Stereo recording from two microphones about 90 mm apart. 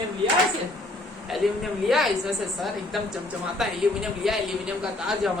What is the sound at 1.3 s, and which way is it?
Speech, centre (ahead or behind).